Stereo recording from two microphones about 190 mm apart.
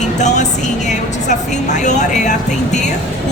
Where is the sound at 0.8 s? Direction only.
40° left (ahead or behind).